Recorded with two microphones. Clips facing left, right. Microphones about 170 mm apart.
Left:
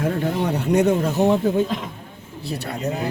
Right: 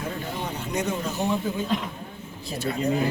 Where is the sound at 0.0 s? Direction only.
65° left (ahead or behind).